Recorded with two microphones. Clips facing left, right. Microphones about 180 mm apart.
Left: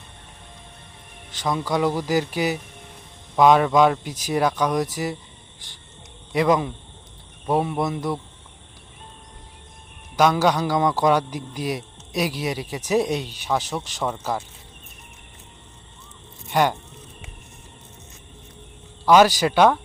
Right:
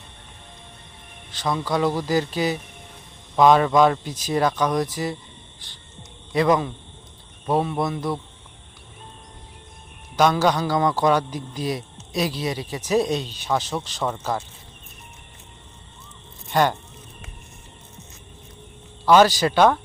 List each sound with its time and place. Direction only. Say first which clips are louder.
1.4 s a man's voice: even; 15° left (ahead or behind)
6.3 s a man's voice: even; 15° left (ahead or behind)
10.2 s a man's voice: even; 10° left (ahead or behind)
16.5 s speech: even; 10° left (ahead or behind)
19.0 s a man's voice: even; 10° left (ahead or behind)